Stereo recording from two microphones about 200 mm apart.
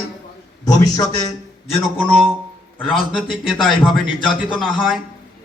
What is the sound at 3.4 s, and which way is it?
Speech, centre (ahead or behind).